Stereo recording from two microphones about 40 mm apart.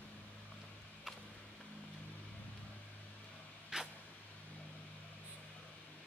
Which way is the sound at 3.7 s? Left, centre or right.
Centre.